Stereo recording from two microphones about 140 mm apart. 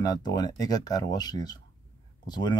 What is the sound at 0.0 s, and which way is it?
A man's voice, 25° left (ahead or behind).